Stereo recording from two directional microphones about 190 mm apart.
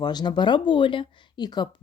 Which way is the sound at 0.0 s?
20° left (ahead or behind).